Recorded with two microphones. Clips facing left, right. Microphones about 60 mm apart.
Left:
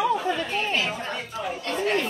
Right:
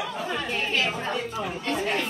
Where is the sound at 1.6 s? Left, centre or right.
Centre.